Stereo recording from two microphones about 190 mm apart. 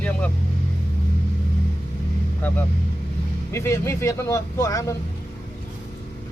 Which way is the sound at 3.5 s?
15° left (ahead or behind).